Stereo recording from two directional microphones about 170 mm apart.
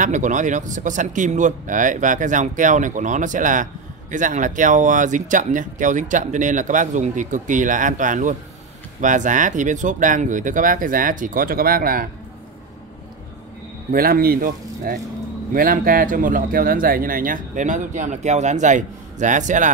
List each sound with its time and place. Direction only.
0.0 s speech: 45° right (ahead or behind)
13.9 s speech: 60° right (ahead or behind)